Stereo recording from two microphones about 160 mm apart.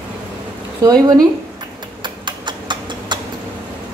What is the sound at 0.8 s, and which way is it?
Speech, 20° right (ahead or behind).